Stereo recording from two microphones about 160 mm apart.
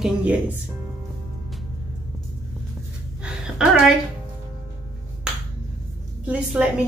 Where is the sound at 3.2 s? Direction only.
5° right (ahead or behind).